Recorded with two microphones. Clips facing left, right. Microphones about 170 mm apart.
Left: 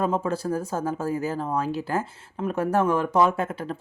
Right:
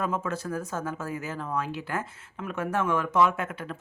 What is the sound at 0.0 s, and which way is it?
Speech, 30° left (ahead or behind).